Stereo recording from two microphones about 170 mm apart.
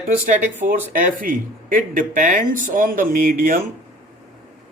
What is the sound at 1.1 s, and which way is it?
Speech, 55° right (ahead or behind).